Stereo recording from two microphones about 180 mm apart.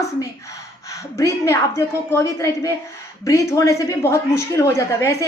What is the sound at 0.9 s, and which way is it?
A woman's voice, 15° left (ahead or behind).